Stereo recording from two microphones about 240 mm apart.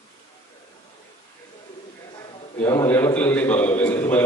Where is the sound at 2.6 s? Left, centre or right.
Centre.